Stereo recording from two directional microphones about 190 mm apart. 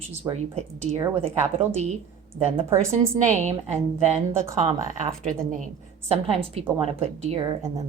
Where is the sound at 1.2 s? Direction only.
35° right (ahead or behind).